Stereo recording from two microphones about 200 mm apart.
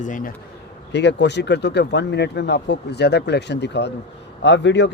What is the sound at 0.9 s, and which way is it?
Speech, 60° left (ahead or behind).